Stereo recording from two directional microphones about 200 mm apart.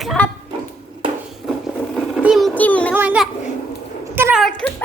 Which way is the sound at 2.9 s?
10° right (ahead or behind).